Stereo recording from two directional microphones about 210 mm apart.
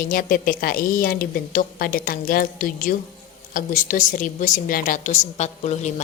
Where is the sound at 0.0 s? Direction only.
40° left (ahead or behind).